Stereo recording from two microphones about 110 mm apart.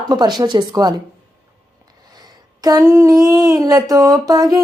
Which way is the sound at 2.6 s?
35° right (ahead or behind).